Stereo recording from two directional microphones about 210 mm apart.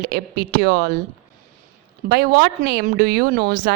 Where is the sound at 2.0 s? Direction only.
50° right (ahead or behind).